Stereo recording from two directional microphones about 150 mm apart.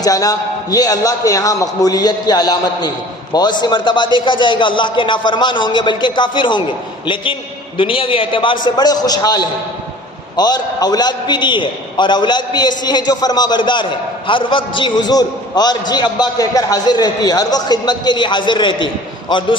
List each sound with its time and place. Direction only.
0.0 s a man's voice: 25° left (ahead or behind)